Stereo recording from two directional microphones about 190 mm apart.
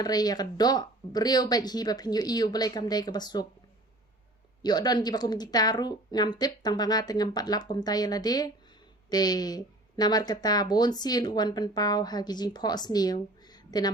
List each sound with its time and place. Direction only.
0.0 s speech: 20° left (ahead or behind)
4.6 s speech: 20° left (ahead or behind)